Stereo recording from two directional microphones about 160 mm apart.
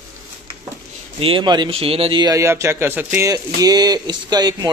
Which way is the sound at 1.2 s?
35° right (ahead or behind).